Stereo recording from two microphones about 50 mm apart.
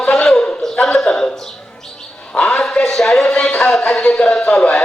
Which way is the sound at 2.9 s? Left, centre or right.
Centre.